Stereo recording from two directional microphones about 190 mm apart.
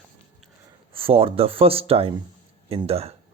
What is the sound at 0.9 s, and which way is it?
Speech, 30° right (ahead or behind).